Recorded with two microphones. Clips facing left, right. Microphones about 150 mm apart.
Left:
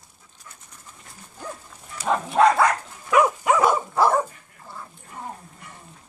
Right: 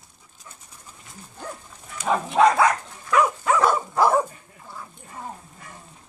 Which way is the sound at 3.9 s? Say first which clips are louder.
Even; centre (ahead or behind).